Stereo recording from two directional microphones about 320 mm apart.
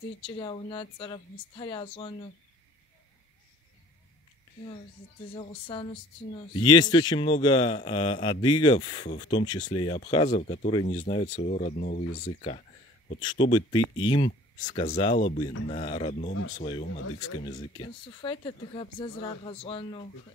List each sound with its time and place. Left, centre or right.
0.4 s a man's voice: centre
5.3 s a man's voice: centre